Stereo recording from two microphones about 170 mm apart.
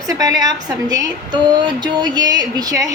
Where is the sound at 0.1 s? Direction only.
20° right (ahead or behind).